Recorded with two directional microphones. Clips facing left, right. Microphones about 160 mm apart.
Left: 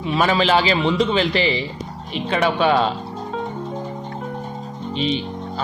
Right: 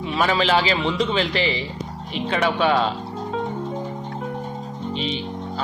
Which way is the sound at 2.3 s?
20° left (ahead or behind).